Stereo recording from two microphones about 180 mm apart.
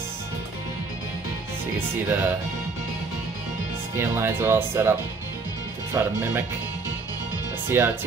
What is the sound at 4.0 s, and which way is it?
Speech, 15° right (ahead or behind).